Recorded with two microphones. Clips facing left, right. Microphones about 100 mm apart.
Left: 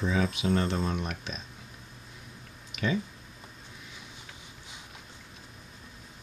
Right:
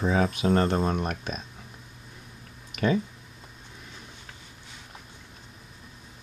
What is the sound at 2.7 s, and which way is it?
Speech, 45° right (ahead or behind).